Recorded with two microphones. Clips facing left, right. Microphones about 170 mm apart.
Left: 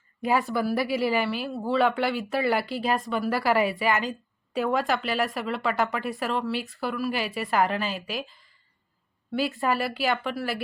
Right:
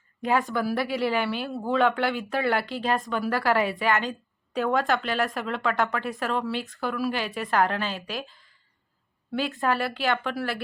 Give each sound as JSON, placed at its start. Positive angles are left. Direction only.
{"t": 0.2, "sound": "a woman's voice", "side_deg": 5}